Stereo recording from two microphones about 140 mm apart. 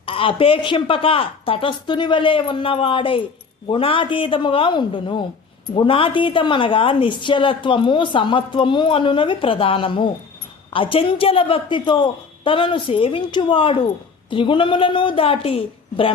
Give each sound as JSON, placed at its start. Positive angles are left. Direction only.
{"t": 0.0, "sound": "a woman's voice", "side_deg": 40}